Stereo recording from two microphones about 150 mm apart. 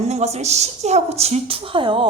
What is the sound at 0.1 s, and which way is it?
A woman's voice, 45° right (ahead or behind).